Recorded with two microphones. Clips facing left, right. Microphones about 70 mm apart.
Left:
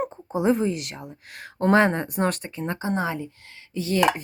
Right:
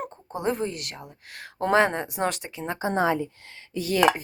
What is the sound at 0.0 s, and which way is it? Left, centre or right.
A woman's voice, centre.